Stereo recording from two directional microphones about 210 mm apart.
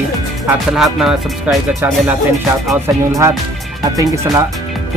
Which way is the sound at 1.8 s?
10° right (ahead or behind).